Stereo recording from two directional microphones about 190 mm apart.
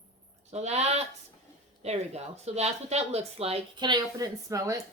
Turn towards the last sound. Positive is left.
turn(degrees=-15)  # may be behind; listen again after turning